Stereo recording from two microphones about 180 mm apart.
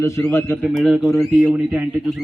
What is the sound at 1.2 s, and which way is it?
Speech, 5° right (ahead or behind).